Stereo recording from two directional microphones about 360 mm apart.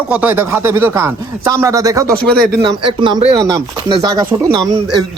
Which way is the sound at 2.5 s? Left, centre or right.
Centre.